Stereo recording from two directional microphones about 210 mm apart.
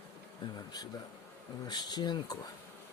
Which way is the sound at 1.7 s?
20° left (ahead or behind).